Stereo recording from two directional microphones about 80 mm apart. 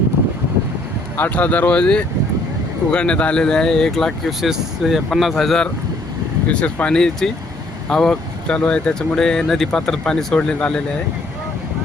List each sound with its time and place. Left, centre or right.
1.1 s a man's voice: left; by 5.6 s centre
6.5 s speech: centre